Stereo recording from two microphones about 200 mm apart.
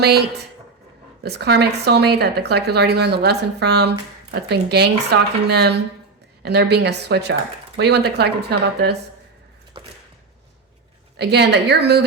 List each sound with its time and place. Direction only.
0.0 s speech: 55° right (ahead or behind)
11.2 s speech: 55° right (ahead or behind)